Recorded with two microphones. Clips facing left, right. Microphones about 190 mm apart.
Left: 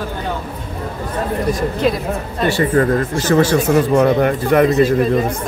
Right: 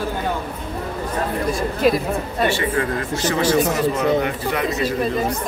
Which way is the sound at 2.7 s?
45° left (ahead or behind).